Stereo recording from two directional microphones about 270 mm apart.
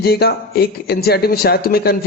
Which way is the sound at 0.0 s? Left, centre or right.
Left.